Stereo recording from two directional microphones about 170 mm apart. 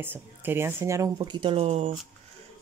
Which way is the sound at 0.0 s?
10° right (ahead or behind).